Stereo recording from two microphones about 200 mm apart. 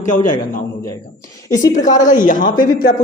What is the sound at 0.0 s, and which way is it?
Speech, 40° left (ahead or behind).